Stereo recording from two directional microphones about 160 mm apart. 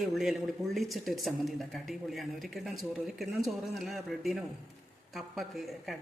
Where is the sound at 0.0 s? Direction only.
Centre (ahead or behind).